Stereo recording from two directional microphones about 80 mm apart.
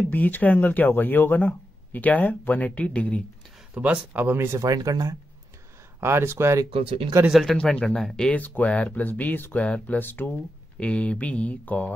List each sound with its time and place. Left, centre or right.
0.1 s speech: left
3.7 s speech: centre
4.6 s speech: right
5.9 s speech: right
7.2 s speech: centre
7.5 s speech: centre
10.3 s speech: centre